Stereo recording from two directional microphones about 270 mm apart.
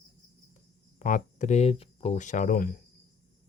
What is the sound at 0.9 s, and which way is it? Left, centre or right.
Speech, left.